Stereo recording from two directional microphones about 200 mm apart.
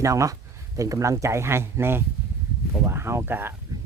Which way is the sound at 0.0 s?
15° right (ahead or behind).